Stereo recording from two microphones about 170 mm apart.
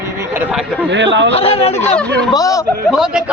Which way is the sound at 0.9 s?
90° right.